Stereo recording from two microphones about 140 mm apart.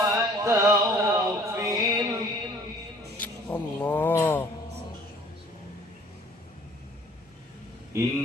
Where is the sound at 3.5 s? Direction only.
15° left (ahead or behind).